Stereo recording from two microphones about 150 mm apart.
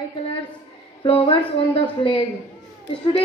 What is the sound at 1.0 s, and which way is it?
A woman's voice, 40° left (ahead or behind).